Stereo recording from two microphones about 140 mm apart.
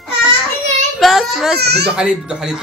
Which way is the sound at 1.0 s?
Centre (ahead or behind).